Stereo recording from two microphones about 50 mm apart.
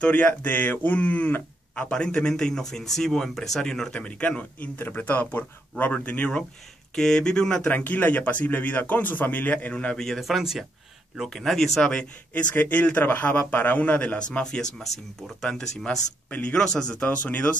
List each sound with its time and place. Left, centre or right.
0.0 s a man's voice: left
1.9 s speech: centre
3.9 s a man's voice: left
5.9 s a man's voice: left
7.0 s speech: centre
7.7 s speech: left
9.9 s speech: centre
10.2 s speech: centre
11.2 s speech: centre
11.8 s a man's voice: left
16.3 s speech: left
16.5 s speech: centre
17.0 s a man's voice: left